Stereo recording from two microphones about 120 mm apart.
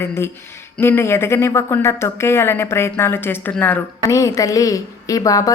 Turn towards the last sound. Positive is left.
turn(degrees=30)  # may be behind; listen again after turning